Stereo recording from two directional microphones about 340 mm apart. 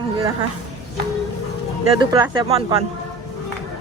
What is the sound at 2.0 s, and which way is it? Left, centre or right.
Speech, centre.